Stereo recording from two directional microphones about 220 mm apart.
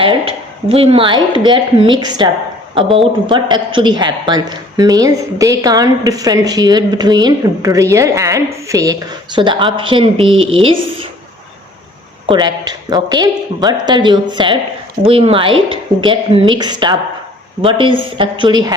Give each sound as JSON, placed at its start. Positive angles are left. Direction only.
{"t": 0.0, "sound": "a woman's voice", "side_deg": -25}
{"t": 12.2, "sound": "a woman's voice", "side_deg": -20}